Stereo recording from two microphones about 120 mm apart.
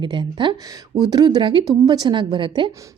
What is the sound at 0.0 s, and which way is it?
A woman's voice, 40° right (ahead or behind).